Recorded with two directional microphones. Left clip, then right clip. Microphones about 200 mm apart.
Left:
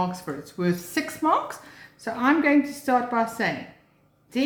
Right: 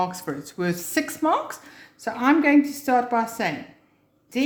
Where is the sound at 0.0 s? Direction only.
35° right (ahead or behind).